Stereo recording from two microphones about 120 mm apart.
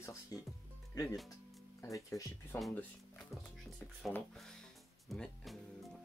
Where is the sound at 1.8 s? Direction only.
25° left (ahead or behind).